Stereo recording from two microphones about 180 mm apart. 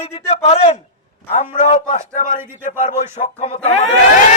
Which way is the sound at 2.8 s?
40° left (ahead or behind).